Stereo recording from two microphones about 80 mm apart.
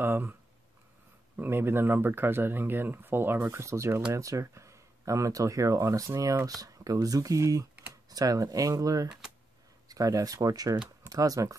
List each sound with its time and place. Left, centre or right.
0.0 s speech: right
3.4 s speech: right